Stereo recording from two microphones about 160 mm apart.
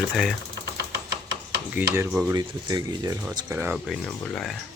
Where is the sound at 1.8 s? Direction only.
10° right (ahead or behind).